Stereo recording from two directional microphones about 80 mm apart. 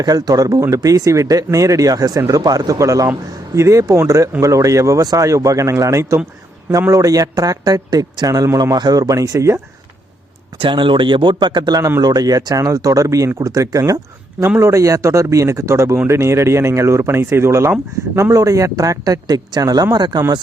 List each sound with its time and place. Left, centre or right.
0.0 s a man's voice: right
10.6 s speech: right
12.0 s a man's voice: right